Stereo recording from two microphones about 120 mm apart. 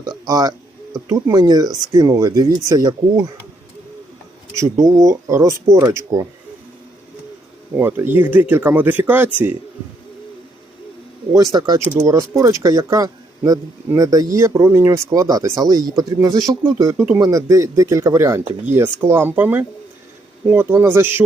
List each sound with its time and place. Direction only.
0.3 s speech: 30° right (ahead or behind)
4.5 s speech: 25° right (ahead or behind)
7.8 s speech: 20° right (ahead or behind)
11.5 s speech: 35° right (ahead or behind)
11.9 s speech: 25° right (ahead or behind)